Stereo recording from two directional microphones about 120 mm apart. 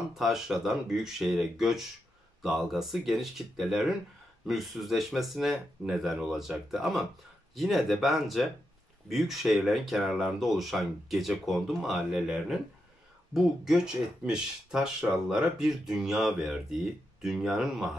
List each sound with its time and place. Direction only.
0.1 s speech: centre (ahead or behind)